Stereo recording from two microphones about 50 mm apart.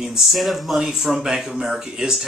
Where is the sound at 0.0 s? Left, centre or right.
Centre.